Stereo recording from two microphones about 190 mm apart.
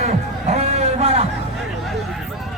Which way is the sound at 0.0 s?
35° right (ahead or behind).